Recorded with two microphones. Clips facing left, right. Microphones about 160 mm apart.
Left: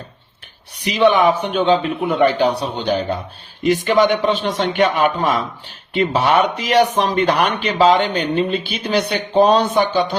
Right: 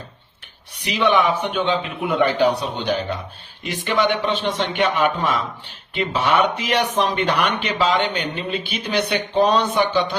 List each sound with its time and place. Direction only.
0.8 s speech: 40° left (ahead or behind)
5.9 s speech: 40° left (ahead or behind)